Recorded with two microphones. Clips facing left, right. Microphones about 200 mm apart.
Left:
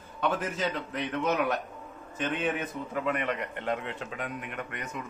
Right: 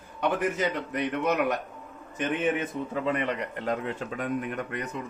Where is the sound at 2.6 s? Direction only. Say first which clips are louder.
Right 3 dB; 25° right (ahead or behind).